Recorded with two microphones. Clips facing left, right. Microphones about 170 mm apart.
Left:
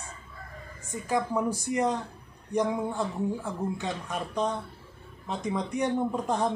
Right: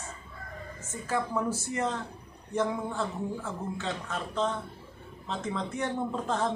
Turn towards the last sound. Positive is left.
turn(degrees=15)  # may be behind; listen again after turning